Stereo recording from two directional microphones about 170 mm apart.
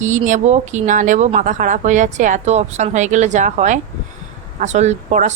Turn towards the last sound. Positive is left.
turn(degrees=-45)  # may be behind; listen again after turning